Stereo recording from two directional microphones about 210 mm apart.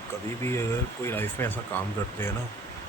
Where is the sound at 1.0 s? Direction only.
10° left (ahead or behind).